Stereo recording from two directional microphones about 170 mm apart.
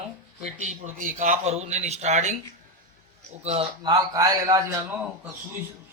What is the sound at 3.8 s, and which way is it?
Speech, 20° right (ahead or behind).